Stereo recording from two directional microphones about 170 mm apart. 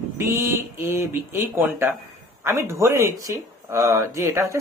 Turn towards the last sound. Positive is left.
turn(degrees=-15)  # may be behind; listen again after turning